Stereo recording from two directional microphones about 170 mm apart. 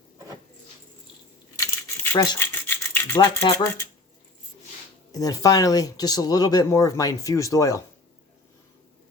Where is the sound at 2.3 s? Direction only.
15° left (ahead or behind).